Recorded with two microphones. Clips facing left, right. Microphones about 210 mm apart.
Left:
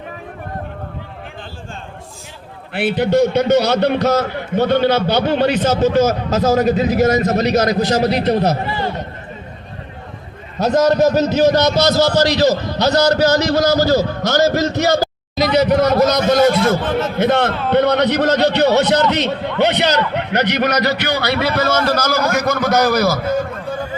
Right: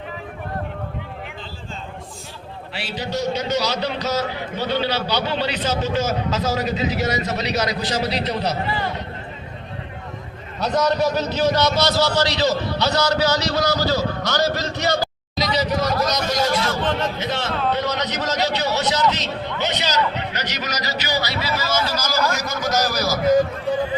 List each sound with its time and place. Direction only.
2.7 s a man's voice: 55° left (ahead or behind)
10.6 s a man's voice: 45° left (ahead or behind)